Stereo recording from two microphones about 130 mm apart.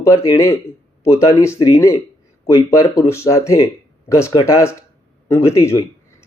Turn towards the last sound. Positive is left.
turn(degrees=25)  # may be behind; listen again after turning